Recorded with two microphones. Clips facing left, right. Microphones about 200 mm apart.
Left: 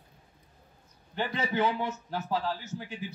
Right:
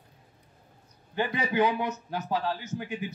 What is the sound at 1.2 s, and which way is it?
A man's voice, 15° right (ahead or behind).